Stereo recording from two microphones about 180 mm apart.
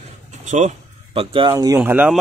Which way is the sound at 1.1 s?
30° right (ahead or behind).